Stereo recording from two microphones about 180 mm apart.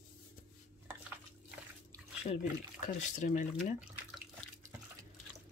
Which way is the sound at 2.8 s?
45° left (ahead or behind).